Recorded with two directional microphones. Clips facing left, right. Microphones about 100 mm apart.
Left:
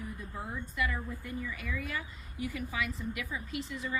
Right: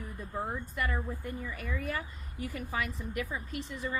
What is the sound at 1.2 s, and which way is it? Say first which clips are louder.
A woman's voice: even; 40° right (ahead or behind).